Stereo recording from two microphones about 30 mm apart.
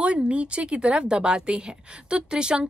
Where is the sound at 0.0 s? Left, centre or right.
Right.